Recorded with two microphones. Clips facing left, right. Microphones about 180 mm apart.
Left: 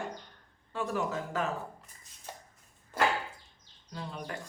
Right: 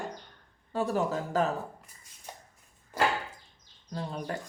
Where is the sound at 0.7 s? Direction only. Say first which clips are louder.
Right 4 dB; 35° right (ahead or behind).